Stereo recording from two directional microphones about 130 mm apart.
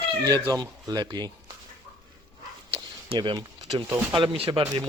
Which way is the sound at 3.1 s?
40° right (ahead or behind).